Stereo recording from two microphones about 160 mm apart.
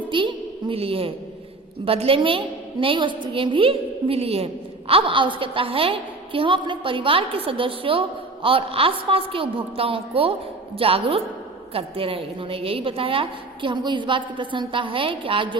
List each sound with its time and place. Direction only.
0.1 s a woman's voice: 30° right (ahead or behind)